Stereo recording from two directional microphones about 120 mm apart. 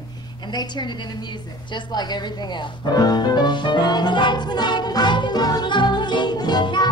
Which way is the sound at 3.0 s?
35° left (ahead or behind).